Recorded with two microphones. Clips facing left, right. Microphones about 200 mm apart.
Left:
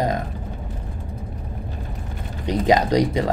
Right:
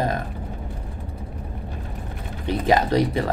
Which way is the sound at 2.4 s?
15° left (ahead or behind).